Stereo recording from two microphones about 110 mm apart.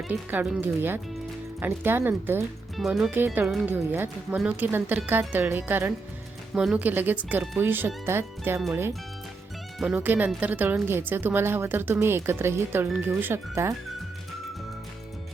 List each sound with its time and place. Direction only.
0.1 s a woman's voice: 15° right (ahead or behind)
2.7 s speech: centre (ahead or behind)
3.7 s a woman's voice: 20° right (ahead or behind)
6.5 s a woman's voice: 5° right (ahead or behind); by 8.6 s 20° right (ahead or behind)
9.9 s a woman's voice: 15° right (ahead or behind)